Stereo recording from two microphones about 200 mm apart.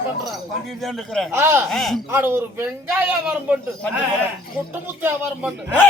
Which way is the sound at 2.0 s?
10° right (ahead or behind).